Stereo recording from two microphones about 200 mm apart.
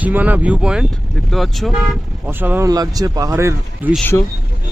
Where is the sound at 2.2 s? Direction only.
10° right (ahead or behind).